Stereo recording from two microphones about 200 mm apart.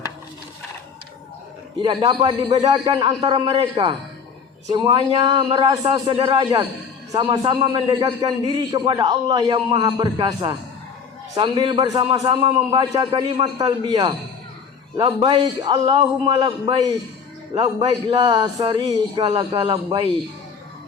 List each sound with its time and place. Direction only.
1.8 s a man's voice: 25° right (ahead or behind)